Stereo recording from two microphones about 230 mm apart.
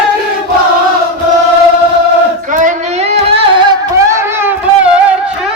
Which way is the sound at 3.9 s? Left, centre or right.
Centre.